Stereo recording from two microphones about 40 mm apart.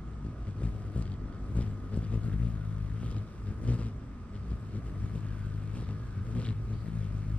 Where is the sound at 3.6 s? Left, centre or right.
Left.